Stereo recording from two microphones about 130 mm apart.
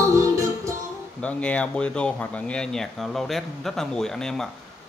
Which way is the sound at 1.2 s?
10° left (ahead or behind).